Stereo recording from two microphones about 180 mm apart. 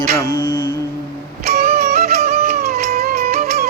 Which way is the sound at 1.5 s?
55° right (ahead or behind).